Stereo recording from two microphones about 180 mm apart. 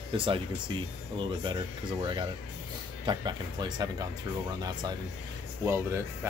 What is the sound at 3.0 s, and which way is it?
Speech, 25° right (ahead or behind).